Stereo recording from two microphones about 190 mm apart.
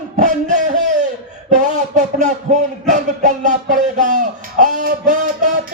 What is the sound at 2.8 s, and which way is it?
Music, 40° right (ahead or behind).